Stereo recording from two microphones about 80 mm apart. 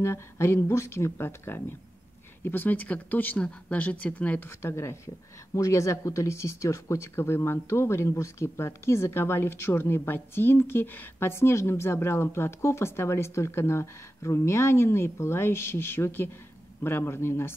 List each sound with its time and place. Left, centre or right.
0.0 s speech: left
4.5 s speech: left